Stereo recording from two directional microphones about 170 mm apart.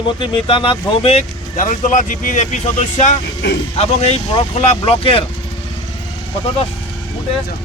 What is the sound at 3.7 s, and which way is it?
Speech, 35° left (ahead or behind).